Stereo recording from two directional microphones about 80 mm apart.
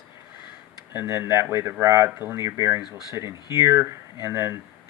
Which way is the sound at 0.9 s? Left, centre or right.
Right.